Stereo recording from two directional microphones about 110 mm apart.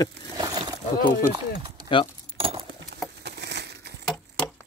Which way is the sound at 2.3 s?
55° right (ahead or behind).